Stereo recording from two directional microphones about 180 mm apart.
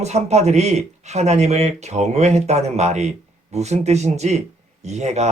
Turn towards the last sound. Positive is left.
turn(degrees=-40)  # may be behind; listen again after turning